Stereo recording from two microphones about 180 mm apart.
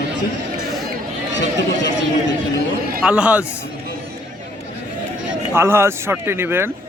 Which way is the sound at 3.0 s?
5° right (ahead or behind).